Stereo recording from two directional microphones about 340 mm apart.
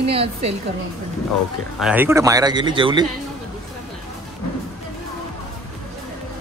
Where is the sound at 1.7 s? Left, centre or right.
Centre.